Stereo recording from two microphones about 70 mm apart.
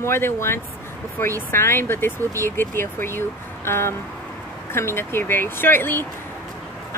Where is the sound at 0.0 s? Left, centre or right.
Left.